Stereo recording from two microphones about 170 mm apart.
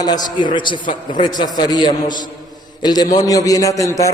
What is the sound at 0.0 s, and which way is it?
A man's voice, 25° left (ahead or behind).